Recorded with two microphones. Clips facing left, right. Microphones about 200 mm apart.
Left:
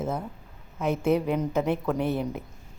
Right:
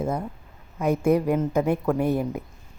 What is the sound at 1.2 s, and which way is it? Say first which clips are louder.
Speech: right 3 dB; 5° right (ahead or behind).